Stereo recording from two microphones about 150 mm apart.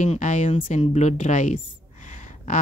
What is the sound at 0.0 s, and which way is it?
A woman's voice, 55° left (ahead or behind).